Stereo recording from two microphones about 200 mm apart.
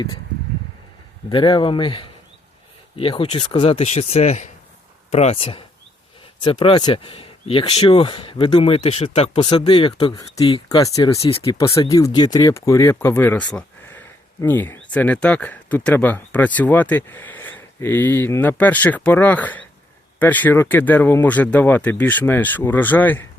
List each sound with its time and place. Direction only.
1.3 s speech: 25° left (ahead or behind)
11.2 s speech: 30° left (ahead or behind); by 23.2 s 10° left (ahead or behind)